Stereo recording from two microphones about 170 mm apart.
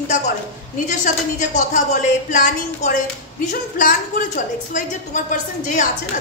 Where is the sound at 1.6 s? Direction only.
50° left (ahead or behind).